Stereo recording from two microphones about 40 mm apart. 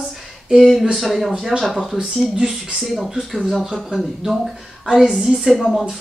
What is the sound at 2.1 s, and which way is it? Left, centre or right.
Speech, centre.